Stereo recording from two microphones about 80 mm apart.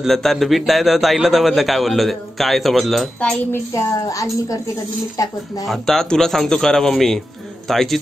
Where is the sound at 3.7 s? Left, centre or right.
Left.